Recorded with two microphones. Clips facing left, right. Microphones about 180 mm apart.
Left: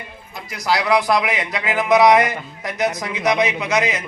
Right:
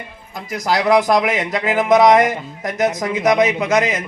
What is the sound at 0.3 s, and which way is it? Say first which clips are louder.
A man's voice: right 2 dB; 45° right (ahead or behind).